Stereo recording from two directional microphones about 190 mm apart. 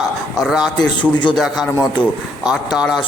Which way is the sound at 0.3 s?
Centre (ahead or behind).